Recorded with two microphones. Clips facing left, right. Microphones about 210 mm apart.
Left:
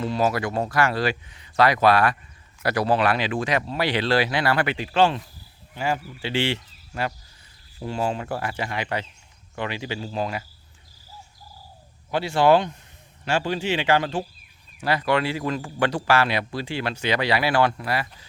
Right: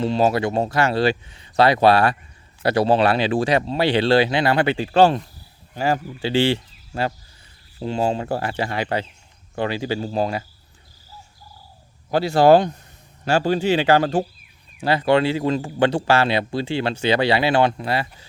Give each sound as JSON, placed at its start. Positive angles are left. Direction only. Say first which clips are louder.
{"t": 0.0, "sound": "speech", "louder": "right 4 dB", "side_deg": -25}
{"t": 12.1, "sound": "speech", "louder": "right 5 dB", "side_deg": -40}
{"t": 14.8, "sound": "speech", "louder": "right 5 dB", "side_deg": -25}